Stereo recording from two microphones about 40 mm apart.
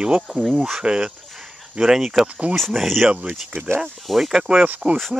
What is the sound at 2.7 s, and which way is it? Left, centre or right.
Speech, centre.